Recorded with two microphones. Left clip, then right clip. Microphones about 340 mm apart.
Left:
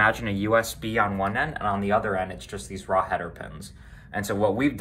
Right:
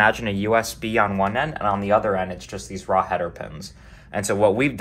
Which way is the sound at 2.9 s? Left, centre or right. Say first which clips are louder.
Right 3 dB; centre.